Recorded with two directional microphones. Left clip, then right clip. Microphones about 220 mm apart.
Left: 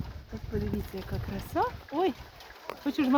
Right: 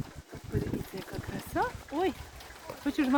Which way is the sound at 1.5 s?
Centre (ahead or behind).